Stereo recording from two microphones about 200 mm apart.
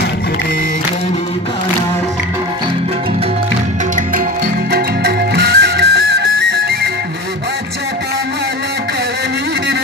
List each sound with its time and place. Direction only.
4.7 s music: 50° right (ahead or behind)